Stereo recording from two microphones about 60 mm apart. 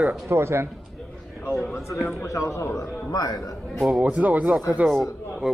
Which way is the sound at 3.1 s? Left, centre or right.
Left.